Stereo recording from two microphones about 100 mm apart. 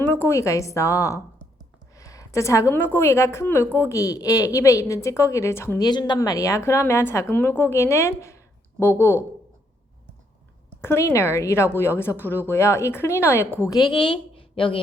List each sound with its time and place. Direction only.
0.0 s a woman's voice: 25° left (ahead or behind)
2.0 s a sound: 35° left (ahead or behind)
2.7 s a woman's voice: 20° left (ahead or behind)
3.8 s a woman's voice: 35° left (ahead or behind)
5.8 s a woman's voice: 45° left (ahead or behind); by 9.2 s 25° left (ahead or behind)
10.8 s a woman's voice: 25° left (ahead or behind)
13.7 s a woman's voice: 45° left (ahead or behind); by 14.8 s 60° left (ahead or behind)